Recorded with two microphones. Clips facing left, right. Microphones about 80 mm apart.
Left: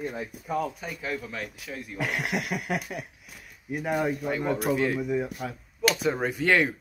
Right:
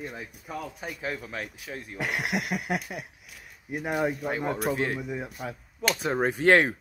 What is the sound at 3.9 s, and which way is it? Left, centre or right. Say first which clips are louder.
Speech: left 1 dB; centre.